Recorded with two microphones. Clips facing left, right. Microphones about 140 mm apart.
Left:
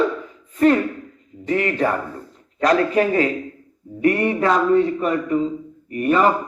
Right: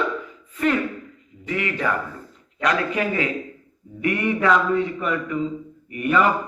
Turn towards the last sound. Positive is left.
turn(degrees=35)  # may be behind; listen again after turning